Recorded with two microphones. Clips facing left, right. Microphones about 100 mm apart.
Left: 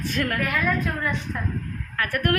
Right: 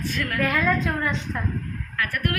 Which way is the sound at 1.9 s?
50° left (ahead or behind).